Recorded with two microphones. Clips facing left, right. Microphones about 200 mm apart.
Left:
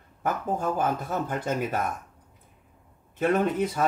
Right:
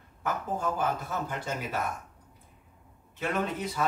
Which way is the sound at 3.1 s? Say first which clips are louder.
Left 8 dB; 50° left (ahead or behind).